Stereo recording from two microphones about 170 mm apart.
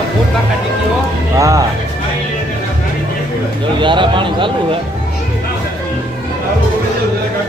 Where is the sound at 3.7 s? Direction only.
30° right (ahead or behind).